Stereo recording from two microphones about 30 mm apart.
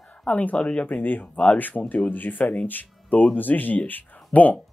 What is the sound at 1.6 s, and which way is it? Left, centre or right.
Speech, left.